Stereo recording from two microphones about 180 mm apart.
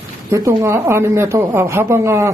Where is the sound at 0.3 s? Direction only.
15° right (ahead or behind).